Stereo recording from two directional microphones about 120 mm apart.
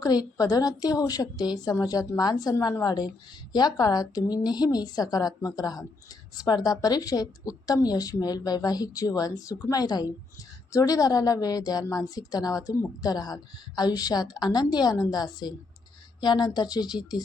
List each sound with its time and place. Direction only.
0.0 s a woman's voice: 30° left (ahead or behind)